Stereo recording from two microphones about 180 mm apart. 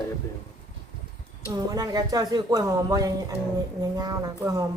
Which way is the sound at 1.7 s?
20° right (ahead or behind).